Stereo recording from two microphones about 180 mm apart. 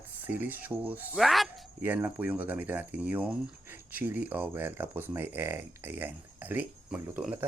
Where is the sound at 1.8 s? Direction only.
10° right (ahead or behind).